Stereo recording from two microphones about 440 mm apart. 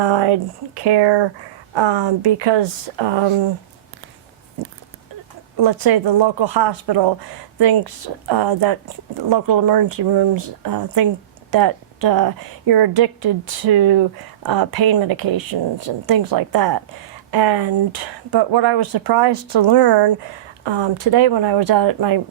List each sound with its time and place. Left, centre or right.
0.0 s speech: right
5.5 s speech: right
8.3 s speech: right
9.3 s a woman's voice: right
20.7 s speech: right